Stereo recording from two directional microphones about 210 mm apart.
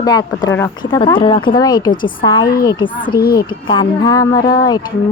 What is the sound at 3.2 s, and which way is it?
Speech, 45° left (ahead or behind).